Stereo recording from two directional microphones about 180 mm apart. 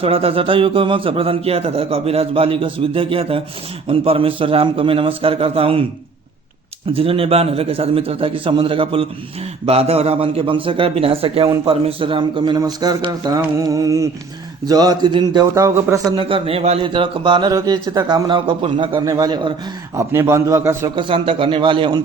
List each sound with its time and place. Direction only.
0.0 s a man's voice: 30° right (ahead or behind)
6.9 s a man's voice: 30° right (ahead or behind)